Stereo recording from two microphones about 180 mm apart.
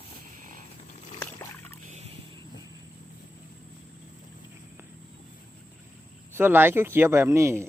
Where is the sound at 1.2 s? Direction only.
10° left (ahead or behind).